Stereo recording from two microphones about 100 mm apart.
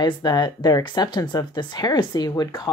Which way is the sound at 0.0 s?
45° left (ahead or behind).